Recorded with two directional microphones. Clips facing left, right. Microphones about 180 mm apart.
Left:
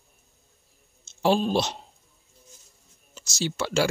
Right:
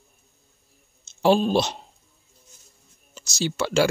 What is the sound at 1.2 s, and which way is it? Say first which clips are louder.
Speech: right 3 dB; 75° right (ahead or behind).